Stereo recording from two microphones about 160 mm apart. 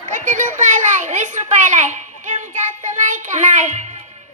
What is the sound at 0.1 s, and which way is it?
A child's voice, 50° right (ahead or behind).